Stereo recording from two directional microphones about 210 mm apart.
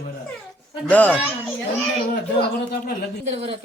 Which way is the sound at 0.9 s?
10° left (ahead or behind).